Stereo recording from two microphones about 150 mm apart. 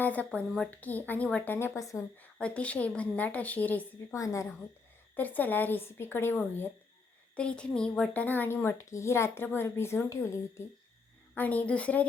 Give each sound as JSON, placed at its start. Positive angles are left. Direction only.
{"t": 0.0, "sound": "speech", "side_deg": 10}
{"t": 2.4, "sound": "speech", "side_deg": 10}
{"t": 4.2, "sound": "a woman's voice", "side_deg": 20}
{"t": 11.3, "sound": "speech", "side_deg": 10}